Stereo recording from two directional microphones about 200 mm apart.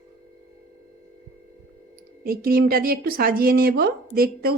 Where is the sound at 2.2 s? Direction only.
45° right (ahead or behind).